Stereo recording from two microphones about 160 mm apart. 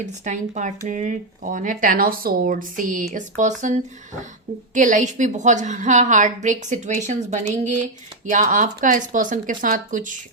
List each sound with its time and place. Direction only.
0.0 s a woman's voice: 50° right (ahead or behind)